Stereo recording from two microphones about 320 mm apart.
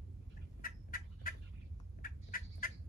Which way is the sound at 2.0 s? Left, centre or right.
Left.